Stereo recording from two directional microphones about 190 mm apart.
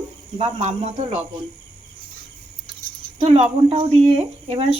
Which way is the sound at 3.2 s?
30° right (ahead or behind).